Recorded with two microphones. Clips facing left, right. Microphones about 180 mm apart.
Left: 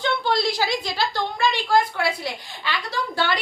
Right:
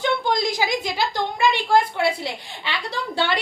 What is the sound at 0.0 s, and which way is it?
A woman's voice, 15° right (ahead or behind).